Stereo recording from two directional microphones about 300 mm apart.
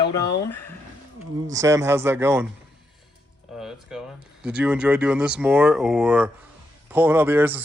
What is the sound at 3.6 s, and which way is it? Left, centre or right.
Speech, centre.